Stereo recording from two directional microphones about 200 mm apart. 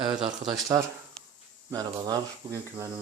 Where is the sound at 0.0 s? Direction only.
20° right (ahead or behind).